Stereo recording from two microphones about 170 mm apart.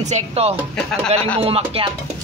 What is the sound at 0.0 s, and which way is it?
Speech, 40° right (ahead or behind).